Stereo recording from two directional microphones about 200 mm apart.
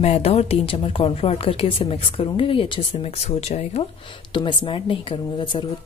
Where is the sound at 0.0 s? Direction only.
30° left (ahead or behind).